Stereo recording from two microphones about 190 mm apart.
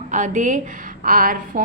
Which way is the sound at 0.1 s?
40° right (ahead or behind).